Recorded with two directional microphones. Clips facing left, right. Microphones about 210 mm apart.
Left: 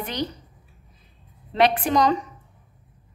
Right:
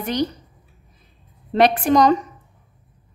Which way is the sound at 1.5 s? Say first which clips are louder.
Right 4 dB; 45° right (ahead or behind).